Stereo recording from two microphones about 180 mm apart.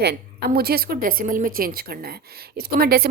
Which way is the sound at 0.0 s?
60° right (ahead or behind).